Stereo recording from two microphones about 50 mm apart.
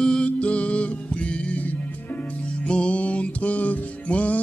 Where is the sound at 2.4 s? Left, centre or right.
Centre.